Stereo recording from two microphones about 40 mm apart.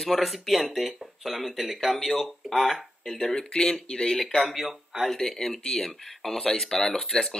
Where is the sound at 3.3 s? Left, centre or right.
Left.